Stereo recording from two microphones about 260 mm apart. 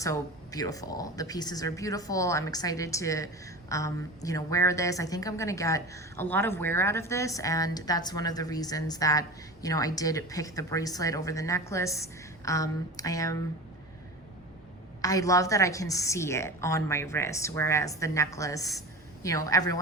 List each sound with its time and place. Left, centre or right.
0.0 s speech: centre
15.0 s speech: centre